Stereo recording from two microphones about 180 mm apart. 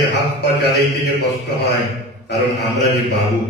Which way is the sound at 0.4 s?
65° left (ahead or behind).